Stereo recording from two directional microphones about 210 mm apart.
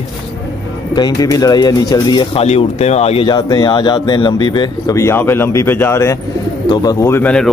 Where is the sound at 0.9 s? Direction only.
15° left (ahead or behind).